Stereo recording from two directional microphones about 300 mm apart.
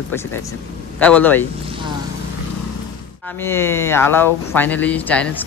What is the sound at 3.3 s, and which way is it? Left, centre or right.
Speech, centre.